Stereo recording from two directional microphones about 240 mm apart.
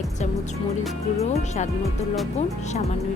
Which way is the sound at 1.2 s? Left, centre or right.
Left.